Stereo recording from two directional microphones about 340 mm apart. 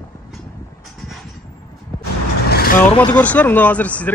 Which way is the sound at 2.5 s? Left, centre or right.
Left.